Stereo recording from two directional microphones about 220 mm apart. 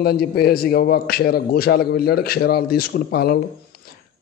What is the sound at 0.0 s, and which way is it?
A man's voice, 45° left (ahead or behind).